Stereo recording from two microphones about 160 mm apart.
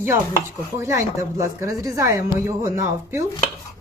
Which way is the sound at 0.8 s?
15° right (ahead or behind).